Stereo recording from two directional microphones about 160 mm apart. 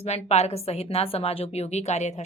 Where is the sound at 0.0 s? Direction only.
40° left (ahead or behind).